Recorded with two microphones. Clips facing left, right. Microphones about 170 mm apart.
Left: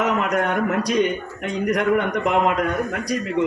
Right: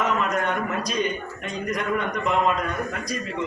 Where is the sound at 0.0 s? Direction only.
70° left (ahead or behind).